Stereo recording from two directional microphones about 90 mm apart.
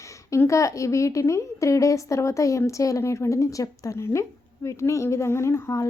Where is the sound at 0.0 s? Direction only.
35° left (ahead or behind).